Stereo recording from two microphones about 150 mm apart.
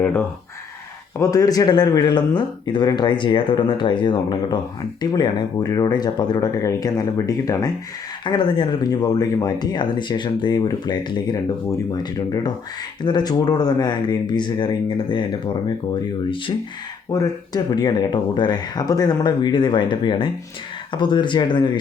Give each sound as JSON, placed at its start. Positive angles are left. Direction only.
{"t": 1.2, "sound": "speech", "side_deg": 25}
{"t": 17.1, "sound": "speech", "side_deg": 25}